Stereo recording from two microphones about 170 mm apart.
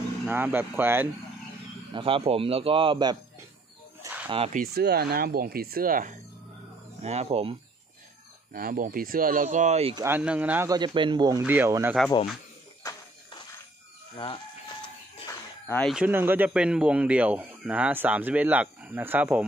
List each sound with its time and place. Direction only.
0.3 s speech: 10° right (ahead or behind)
2.0 s speech: 30° right (ahead or behind)
4.7 s speech: 70° right (ahead or behind)
7.0 s speech: 40° right (ahead or behind)
8.5 s speech: 55° right (ahead or behind); by 9.9 s 40° right (ahead or behind)
9.9 s speech: 10° right (ahead or behind)
10.7 s speech: 25° right (ahead or behind)
11.4 s speech: 10° right (ahead or behind)
12.8 s a sound: 25° left (ahead or behind)
15.6 s speech: 10° left (ahead or behind)
15.9 s speech: 10° right (ahead or behind)